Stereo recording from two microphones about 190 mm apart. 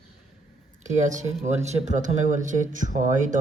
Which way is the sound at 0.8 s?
40° right (ahead or behind).